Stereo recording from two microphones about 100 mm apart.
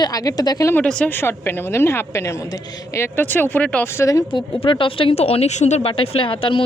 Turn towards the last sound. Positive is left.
turn(degrees=60)  # may be behind; listen again after turning